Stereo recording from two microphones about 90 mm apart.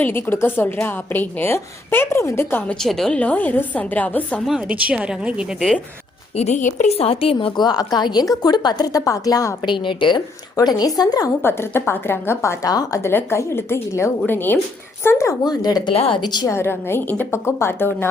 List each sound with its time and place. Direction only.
0.0 s a woman's voice: 25° left (ahead or behind)
3.1 s a woman's voice: 15° left (ahead or behind)
4.4 s a woman's voice: 15° right (ahead or behind)
7.0 s speech: 90° left
7.5 s a woman's voice: 50° left (ahead or behind)
9.6 s a woman's voice: 65° left (ahead or behind)
10.6 s a woman's voice: 45° left (ahead or behind)
11.4 s a woman's voice: 25° left (ahead or behind)
12.6 s a woman's voice: 45° left (ahead or behind)
13.1 s a woman's voice: 30° left (ahead or behind)
15.4 s a woman's voice: 50° left (ahead or behind)
15.9 s a woman's voice: 85° left
16.2 s a woman's voice: 55° left (ahead or behind)
16.5 s a woman's voice: 25° left (ahead or behind)